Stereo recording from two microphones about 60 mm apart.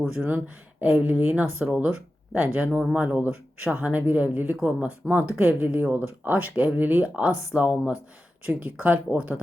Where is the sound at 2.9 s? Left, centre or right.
Right.